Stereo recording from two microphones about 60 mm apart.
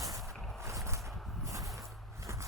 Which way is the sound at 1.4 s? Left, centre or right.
Right.